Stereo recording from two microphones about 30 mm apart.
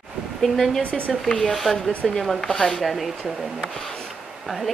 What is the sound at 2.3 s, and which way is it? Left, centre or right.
Speech, centre.